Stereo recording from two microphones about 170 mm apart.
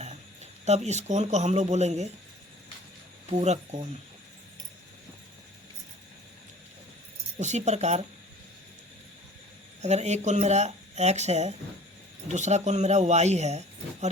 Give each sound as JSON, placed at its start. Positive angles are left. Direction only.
{"t": 0.6, "sound": "speech", "side_deg": -40}
{"t": 3.2, "sound": "speech", "side_deg": -40}
{"t": 7.3, "sound": "speech", "side_deg": -45}
{"t": 9.8, "sound": "speech", "side_deg": -40}